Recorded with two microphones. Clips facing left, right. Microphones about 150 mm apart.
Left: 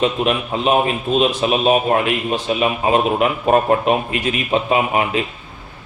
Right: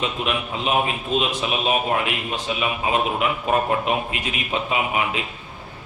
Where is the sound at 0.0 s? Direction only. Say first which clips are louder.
Left 7 dB; 45° left (ahead or behind).